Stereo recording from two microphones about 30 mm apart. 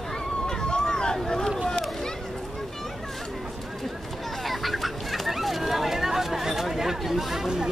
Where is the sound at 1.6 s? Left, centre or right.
Left.